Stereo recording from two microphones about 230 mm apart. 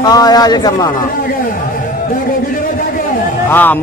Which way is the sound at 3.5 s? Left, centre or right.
Centre.